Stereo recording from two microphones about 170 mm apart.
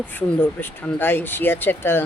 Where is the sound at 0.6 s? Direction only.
10° left (ahead or behind).